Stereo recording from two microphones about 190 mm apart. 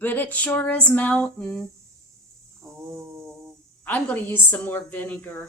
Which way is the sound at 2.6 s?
15° right (ahead or behind).